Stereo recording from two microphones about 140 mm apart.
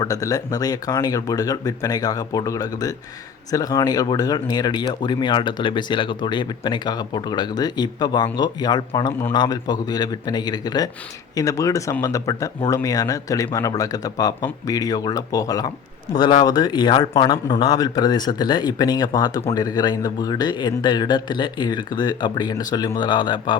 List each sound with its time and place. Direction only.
0.0 s speech: 25° left (ahead or behind)